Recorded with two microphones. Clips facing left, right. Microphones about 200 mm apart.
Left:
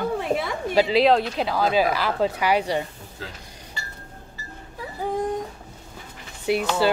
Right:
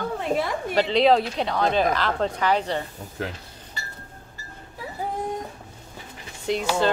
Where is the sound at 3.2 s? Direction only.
60° right (ahead or behind).